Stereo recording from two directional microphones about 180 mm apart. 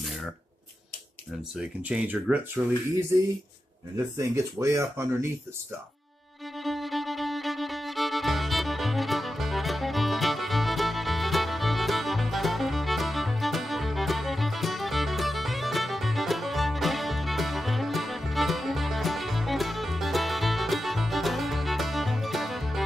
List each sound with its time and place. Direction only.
1.8 s speech: 10° right (ahead or behind)
4.2 s speech: 15° right (ahead or behind)
6.6 s music: centre (ahead or behind)